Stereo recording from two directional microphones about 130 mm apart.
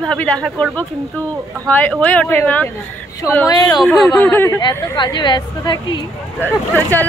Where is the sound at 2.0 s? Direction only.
10° left (ahead or behind).